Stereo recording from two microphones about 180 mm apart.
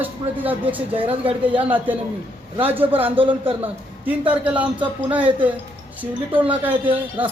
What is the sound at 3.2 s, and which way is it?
Speech, 30° right (ahead or behind).